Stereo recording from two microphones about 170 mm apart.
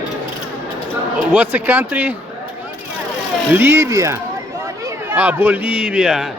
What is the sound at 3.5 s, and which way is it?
A man's voice, 15° right (ahead or behind).